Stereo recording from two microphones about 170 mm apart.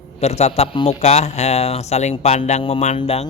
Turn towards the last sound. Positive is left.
turn(degrees=35)  # may be behind; listen again after turning